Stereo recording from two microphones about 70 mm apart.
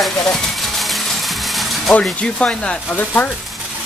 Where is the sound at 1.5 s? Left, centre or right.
Centre.